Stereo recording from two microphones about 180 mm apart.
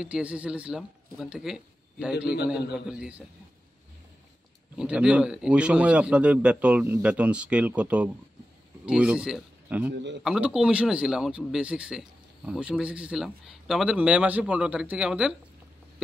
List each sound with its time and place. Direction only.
0.0 s speech: 5° right (ahead or behind)
4.7 s a man's voice: 5° right (ahead or behind)
9.9 s speech: 75° right (ahead or behind)
10.2 s speech: 5° right (ahead or behind)